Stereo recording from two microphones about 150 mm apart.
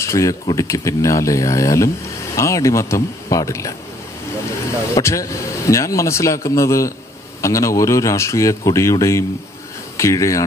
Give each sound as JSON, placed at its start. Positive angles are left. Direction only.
{"t": 0.0, "sound": "speech", "side_deg": 20}
{"t": 4.9, "sound": "speech", "side_deg": 20}